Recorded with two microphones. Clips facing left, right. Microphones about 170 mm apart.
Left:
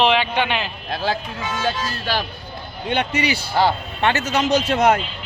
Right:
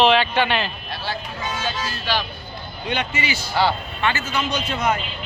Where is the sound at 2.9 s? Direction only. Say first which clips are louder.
Left 4 dB; 60° left (ahead or behind).